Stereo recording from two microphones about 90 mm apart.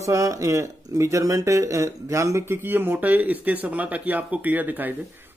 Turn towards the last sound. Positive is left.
turn(degrees=-20)  # may be behind; listen again after turning